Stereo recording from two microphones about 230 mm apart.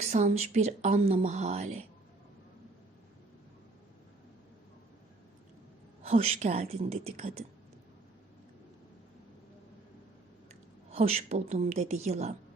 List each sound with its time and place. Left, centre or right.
0.0 s speech: right
6.0 s speech: right
10.9 s speech: right